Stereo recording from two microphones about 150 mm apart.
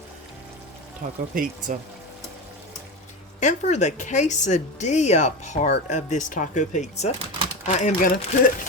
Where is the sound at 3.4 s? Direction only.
50° left (ahead or behind).